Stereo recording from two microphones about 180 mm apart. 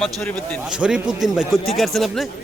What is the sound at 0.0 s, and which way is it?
Speech, 5° left (ahead or behind).